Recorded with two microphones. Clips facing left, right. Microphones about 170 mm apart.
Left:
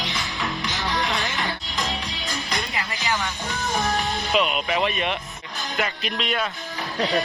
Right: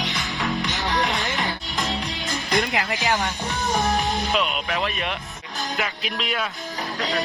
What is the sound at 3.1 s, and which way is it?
Speech, 35° right (ahead or behind).